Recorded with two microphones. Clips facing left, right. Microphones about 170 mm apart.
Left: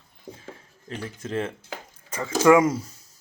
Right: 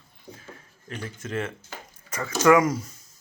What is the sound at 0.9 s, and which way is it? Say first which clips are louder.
Speech: left 2 dB; 30° left (ahead or behind).